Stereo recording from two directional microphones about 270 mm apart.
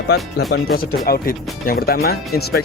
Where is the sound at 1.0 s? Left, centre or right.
Left.